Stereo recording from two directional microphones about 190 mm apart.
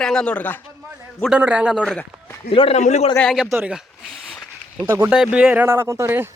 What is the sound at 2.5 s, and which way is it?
Speech, 30° left (ahead or behind).